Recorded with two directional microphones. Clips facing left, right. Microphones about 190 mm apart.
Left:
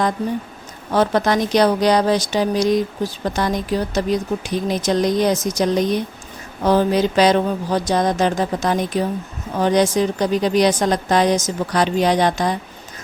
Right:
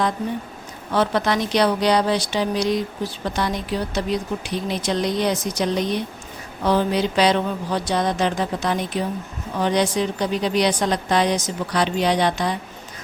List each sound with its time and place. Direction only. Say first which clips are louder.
0.9 s speech: left 3 dB; 45° left (ahead or behind)